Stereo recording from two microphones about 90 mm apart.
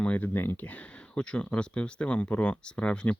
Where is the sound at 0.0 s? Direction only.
15° left (ahead or behind).